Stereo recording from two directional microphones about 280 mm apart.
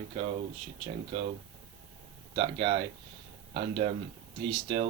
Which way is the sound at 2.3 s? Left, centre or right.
Centre.